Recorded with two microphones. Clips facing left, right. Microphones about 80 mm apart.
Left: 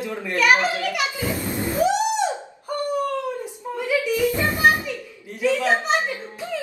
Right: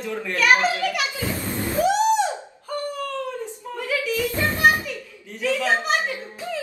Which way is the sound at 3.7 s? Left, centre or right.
Centre.